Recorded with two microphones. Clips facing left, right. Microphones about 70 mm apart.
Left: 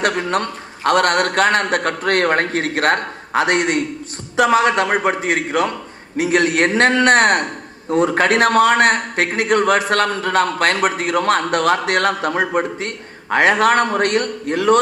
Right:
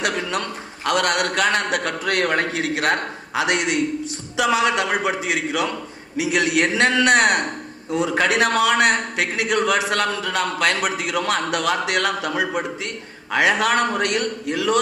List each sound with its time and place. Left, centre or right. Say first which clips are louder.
0.0 s a man's voice: left 5 dB; left